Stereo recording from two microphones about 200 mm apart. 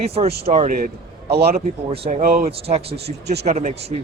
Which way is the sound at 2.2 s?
45° right (ahead or behind).